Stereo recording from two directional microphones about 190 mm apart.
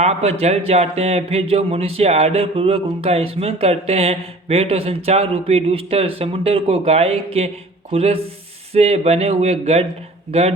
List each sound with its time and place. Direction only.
0.0 s a man's voice: 35° right (ahead or behind)